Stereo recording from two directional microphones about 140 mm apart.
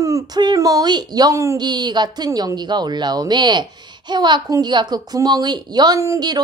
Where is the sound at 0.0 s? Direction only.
25° right (ahead or behind).